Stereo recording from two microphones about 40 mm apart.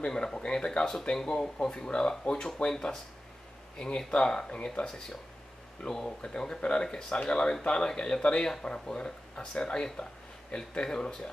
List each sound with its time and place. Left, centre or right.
0.0 s speech: centre
5.9 s speech: left